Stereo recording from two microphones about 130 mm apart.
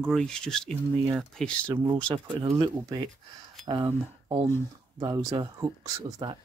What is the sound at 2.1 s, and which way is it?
Speech, 40° right (ahead or behind).